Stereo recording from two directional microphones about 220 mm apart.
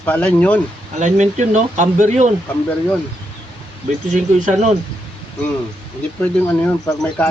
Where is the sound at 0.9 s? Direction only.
35° right (ahead or behind).